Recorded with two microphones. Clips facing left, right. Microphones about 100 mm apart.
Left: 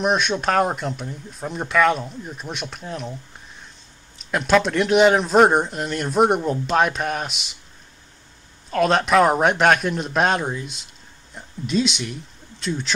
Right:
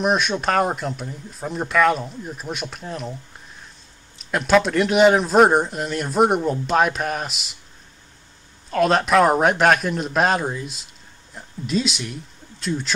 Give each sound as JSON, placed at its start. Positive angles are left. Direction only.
{"t": 0.0, "sound": "speech", "side_deg": 0}
{"t": 4.2, "sound": "speech", "side_deg": 0}
{"t": 8.6, "sound": "speech", "side_deg": 0}